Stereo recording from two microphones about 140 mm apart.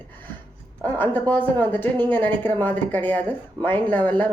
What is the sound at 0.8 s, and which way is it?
Speech, 15° left (ahead or behind).